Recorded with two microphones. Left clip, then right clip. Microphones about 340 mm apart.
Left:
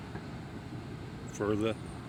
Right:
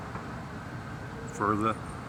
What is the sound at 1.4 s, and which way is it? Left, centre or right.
Speech, left.